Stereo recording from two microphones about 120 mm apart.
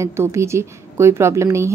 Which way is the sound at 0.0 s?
20° right (ahead or behind).